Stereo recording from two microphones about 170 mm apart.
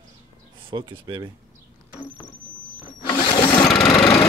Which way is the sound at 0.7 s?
25° right (ahead or behind).